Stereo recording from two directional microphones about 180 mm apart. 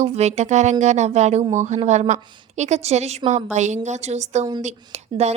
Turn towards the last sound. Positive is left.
turn(degrees=-35)  # may be behind; listen again after turning